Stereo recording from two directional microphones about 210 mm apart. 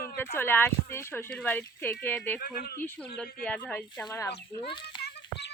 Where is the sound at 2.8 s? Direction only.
10° left (ahead or behind).